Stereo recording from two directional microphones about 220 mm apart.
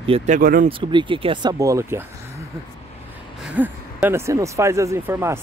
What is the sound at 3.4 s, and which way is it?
Speech, 5° right (ahead or behind).